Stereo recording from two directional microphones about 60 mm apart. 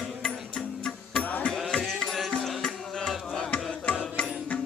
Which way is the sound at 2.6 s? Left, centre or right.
Centre.